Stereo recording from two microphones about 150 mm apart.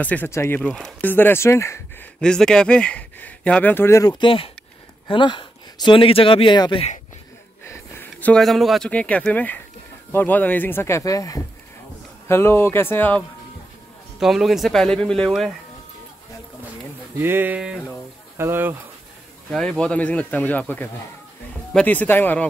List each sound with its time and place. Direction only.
0.0 s speech: 10° left (ahead or behind)
0.7 s speech: centre (ahead or behind)
1.0 s speech: 15° left (ahead or behind)
2.1 s speech: 5° left (ahead or behind)
4.2 s speech: 35° left (ahead or behind)
7.6 s speech: 10° left (ahead or behind)
14.2 s speech: centre (ahead or behind)
17.2 s speech: 15° right (ahead or behind)
19.5 s speech: centre (ahead or behind)